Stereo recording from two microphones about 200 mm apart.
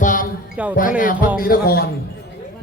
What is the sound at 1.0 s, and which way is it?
Speech, 40° left (ahead or behind).